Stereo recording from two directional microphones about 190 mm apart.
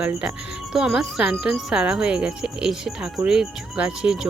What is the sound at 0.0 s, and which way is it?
Speech, 5° right (ahead or behind).